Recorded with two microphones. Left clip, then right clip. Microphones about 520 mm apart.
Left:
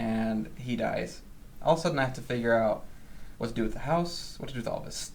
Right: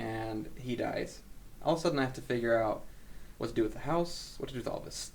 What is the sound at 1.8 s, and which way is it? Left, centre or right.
Speech, right.